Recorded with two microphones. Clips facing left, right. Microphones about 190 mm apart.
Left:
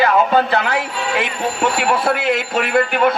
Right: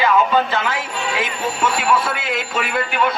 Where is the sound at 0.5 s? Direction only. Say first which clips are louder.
Left 4 dB; 65° left (ahead or behind).